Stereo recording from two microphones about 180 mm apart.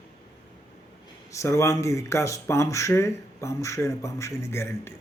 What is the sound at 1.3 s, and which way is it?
Speech, 15° left (ahead or behind).